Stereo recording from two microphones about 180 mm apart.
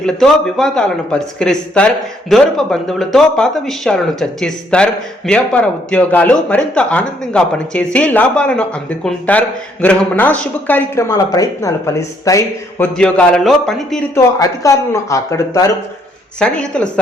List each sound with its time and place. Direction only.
0.0 s a man's voice: 5° left (ahead or behind)
12.8 s speech: 5° left (ahead or behind)
14.3 s a man's voice: 15° left (ahead or behind)
16.4 s speech: 5° left (ahead or behind)